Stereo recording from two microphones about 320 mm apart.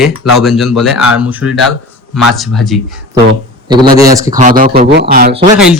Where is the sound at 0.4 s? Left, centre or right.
Centre.